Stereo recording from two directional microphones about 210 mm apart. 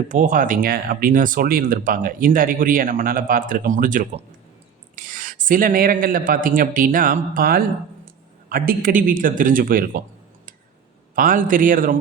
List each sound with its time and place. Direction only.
0.1 s speech: 40° right (ahead or behind)
11.1 s speech: 40° right (ahead or behind)